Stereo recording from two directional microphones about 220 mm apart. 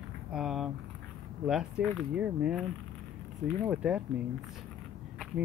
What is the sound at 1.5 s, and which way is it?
Speech, centre (ahead or behind).